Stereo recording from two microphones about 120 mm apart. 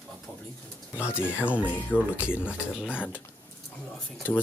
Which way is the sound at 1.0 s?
10° right (ahead or behind).